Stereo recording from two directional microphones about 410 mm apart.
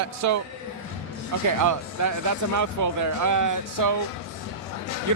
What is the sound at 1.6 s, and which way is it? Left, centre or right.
A man's voice, right.